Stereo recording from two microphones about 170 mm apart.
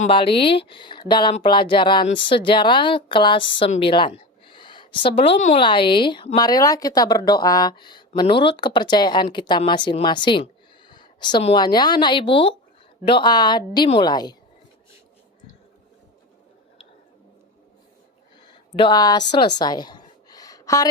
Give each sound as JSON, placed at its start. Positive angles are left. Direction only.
{"t": 0.1, "sound": "a woman's voice", "side_deg": 30}
{"t": 18.4, "sound": "speech", "side_deg": 30}
{"t": 19.5, "sound": "a sound", "side_deg": 25}